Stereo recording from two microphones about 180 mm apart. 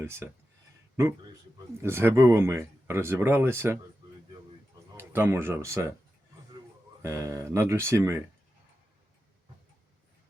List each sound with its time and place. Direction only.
0.0 s speech: 15° right (ahead or behind)
1.8 s speech: 15° right (ahead or behind)
4.9 s speech: 15° right (ahead or behind)
7.0 s speech: 15° right (ahead or behind)